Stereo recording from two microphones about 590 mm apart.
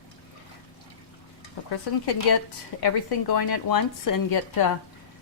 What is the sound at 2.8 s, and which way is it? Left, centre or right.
Speech, left.